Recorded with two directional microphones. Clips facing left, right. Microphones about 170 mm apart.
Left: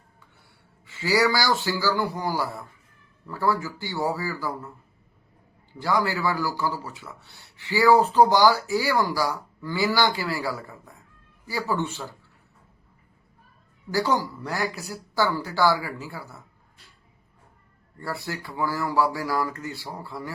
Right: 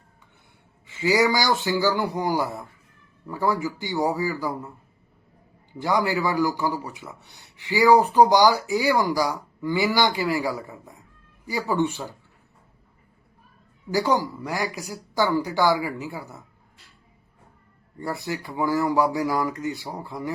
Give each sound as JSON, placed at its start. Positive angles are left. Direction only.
{"t": 0.9, "sound": "a man's voice", "side_deg": -20}
{"t": 5.7, "sound": "a man's voice", "side_deg": -20}
{"t": 13.9, "sound": "a man's voice", "side_deg": -15}
{"t": 18.0, "sound": "speech", "side_deg": -20}